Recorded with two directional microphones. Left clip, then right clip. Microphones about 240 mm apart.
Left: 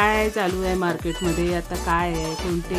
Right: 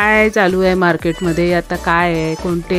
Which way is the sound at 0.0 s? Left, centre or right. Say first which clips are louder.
Right 8 dB; right.